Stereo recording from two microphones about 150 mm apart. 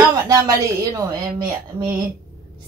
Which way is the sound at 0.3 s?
20° right (ahead or behind).